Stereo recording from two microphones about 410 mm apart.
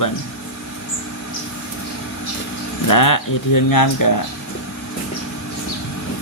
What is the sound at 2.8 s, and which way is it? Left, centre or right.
Speech, left.